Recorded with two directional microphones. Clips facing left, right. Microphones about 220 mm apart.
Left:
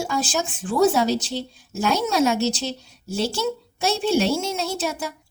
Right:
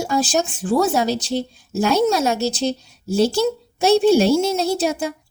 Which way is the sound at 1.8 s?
40° right (ahead or behind).